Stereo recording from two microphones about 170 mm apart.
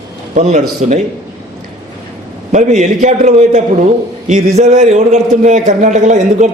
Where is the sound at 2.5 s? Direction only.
45° right (ahead or behind).